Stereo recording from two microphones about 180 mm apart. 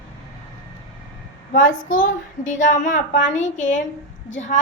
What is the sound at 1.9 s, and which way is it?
A child's voice, 45° left (ahead or behind).